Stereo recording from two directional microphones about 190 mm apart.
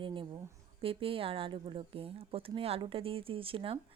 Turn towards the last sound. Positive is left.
turn(degrees=-30)  # may be behind; listen again after turning